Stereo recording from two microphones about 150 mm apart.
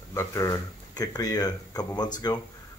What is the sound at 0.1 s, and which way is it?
Speech, 20° left (ahead or behind).